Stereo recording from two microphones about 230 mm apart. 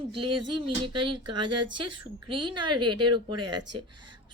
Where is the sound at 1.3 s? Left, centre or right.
Centre.